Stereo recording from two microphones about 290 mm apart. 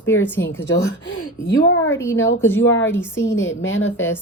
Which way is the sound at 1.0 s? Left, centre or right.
Left.